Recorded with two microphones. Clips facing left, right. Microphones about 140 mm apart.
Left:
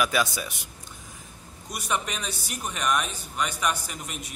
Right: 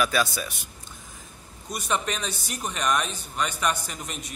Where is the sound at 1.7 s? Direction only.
10° left (ahead or behind).